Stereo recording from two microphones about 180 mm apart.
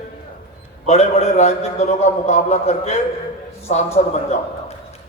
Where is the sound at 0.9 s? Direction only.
35° left (ahead or behind).